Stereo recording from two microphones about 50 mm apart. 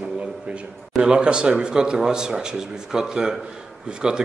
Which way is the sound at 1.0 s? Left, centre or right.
Centre.